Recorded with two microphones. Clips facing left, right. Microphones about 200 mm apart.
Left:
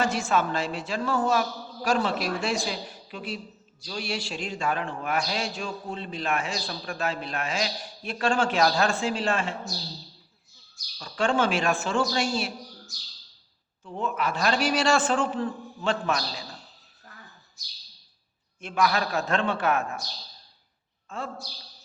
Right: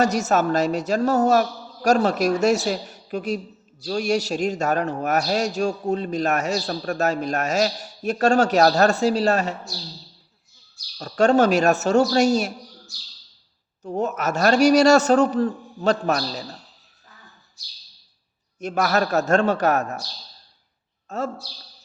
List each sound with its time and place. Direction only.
0.0 s a man's voice: 40° right (ahead or behind)
10.9 s a man's voice: 45° right (ahead or behind)
13.8 s a man's voice: 45° right (ahead or behind)
18.6 s a man's voice: 45° right (ahead or behind)
21.1 s a man's voice: 40° right (ahead or behind)